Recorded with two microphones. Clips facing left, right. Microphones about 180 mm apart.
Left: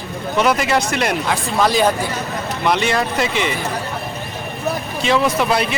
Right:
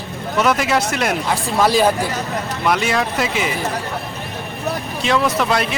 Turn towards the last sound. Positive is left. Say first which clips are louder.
# left 1 dB
turn(degrees=0)  # may be behind; listen again after turning